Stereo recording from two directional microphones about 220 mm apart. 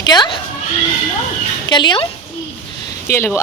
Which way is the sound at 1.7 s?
20° left (ahead or behind).